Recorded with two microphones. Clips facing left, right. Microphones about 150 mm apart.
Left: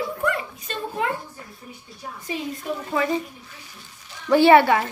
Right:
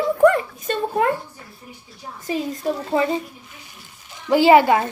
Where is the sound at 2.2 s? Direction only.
40° right (ahead or behind).